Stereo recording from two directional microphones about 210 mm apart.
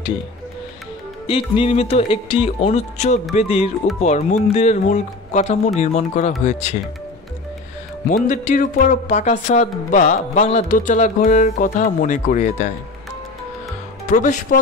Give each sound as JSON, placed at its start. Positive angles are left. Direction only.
{"t": 1.2, "sound": "speech", "side_deg": 25}
{"t": 8.1, "sound": "speech", "side_deg": 35}
{"t": 14.1, "sound": "speech", "side_deg": 35}